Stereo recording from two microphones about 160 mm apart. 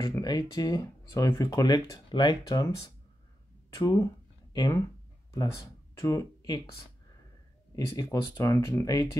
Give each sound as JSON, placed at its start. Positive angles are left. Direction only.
{"t": 0.2, "sound": "speech", "side_deg": 25}
{"t": 3.7, "sound": "speech", "side_deg": 20}
{"t": 5.9, "sound": "speech", "side_deg": 20}
{"t": 7.7, "sound": "speech", "side_deg": 20}